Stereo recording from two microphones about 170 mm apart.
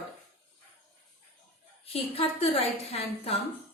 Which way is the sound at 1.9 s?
35° left (ahead or behind).